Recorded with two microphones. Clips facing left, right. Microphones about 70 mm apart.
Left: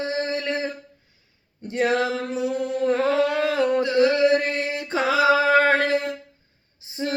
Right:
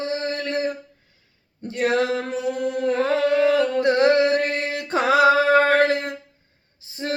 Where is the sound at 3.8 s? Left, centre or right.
Right.